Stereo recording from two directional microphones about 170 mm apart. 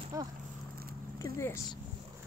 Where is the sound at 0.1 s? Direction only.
20° right (ahead or behind).